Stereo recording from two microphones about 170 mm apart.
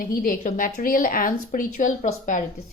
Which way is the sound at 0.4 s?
50° left (ahead or behind).